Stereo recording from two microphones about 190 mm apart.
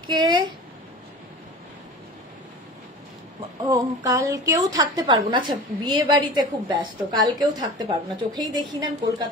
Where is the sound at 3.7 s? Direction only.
15° right (ahead or behind).